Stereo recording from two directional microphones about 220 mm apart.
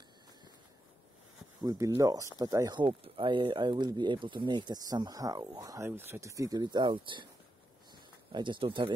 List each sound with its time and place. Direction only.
1.6 s speech: 15° right (ahead or behind)
7.9 s bird: 20° right (ahead or behind)